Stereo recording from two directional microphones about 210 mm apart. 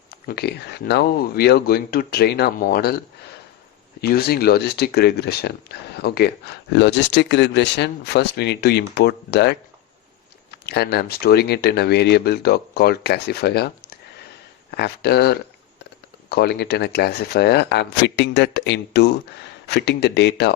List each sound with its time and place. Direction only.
0.1 s speech: 50° left (ahead or behind)
4.0 s speech: 50° left (ahead or behind)
10.7 s speech: 50° left (ahead or behind)
14.7 s speech: 50° left (ahead or behind)